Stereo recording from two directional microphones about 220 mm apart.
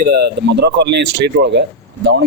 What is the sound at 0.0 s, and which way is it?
A man's voice, 45° right (ahead or behind).